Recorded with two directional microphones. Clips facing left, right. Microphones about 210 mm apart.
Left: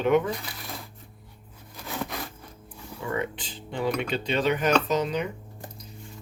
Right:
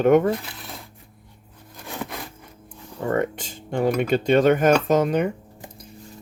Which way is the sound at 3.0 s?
45° right (ahead or behind).